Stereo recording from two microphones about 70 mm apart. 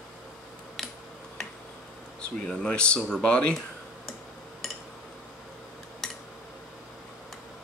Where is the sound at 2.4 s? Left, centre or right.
Centre.